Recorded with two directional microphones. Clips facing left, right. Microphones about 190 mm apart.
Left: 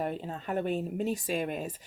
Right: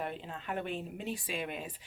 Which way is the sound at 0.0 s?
40° left (ahead or behind).